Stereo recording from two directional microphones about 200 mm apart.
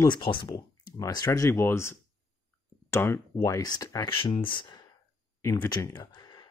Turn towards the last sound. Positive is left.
turn(degrees=20)  # may be behind; listen again after turning